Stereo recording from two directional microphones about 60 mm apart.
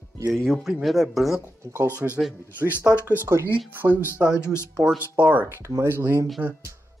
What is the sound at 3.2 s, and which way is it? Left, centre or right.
Speech, right.